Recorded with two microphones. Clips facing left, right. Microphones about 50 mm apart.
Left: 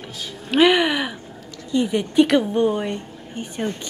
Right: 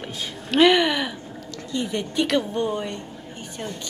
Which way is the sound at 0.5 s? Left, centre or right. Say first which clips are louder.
Left 1 dB; centre.